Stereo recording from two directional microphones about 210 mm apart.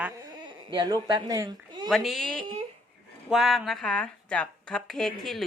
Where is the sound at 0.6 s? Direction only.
20° right (ahead or behind).